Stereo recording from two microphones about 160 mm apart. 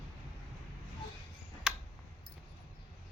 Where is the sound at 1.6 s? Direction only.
5° right (ahead or behind).